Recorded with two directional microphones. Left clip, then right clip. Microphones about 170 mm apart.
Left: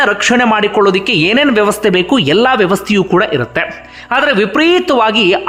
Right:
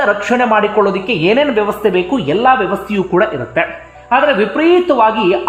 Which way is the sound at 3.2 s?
20° left (ahead or behind).